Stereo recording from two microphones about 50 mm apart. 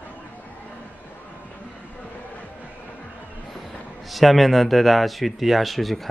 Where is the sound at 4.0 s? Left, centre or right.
Centre.